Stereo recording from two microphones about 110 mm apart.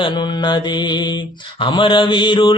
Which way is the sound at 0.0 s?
45° left (ahead or behind).